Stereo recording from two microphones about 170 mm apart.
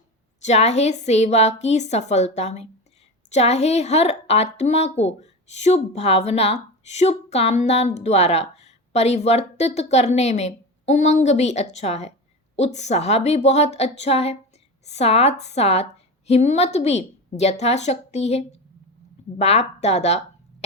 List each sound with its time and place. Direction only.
0.4 s a woman's voice: 40° left (ahead or behind)